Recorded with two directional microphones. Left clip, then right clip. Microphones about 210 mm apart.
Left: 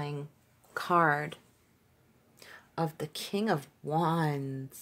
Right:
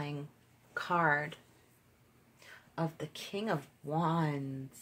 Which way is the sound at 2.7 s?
40° left (ahead or behind).